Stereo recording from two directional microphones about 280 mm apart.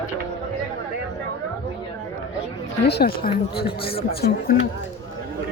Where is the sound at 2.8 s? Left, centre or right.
Left.